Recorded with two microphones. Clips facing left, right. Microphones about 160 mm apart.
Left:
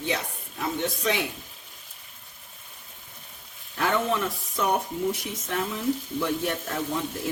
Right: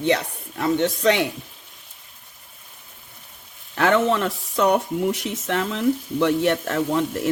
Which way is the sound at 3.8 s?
80° right.